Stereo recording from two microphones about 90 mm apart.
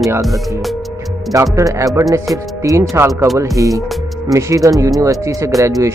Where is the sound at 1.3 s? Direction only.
35° right (ahead or behind).